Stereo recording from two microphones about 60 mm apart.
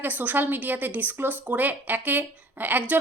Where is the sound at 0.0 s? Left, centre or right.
Right.